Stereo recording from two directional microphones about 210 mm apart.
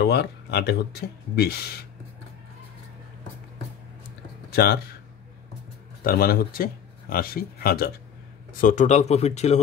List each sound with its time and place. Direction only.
0.0 s speech: 50° left (ahead or behind)
4.5 s a sound: 50° left (ahead or behind)
6.0 s speech: 45° left (ahead or behind)